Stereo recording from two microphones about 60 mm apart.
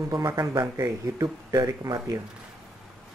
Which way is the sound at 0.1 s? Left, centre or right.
Right.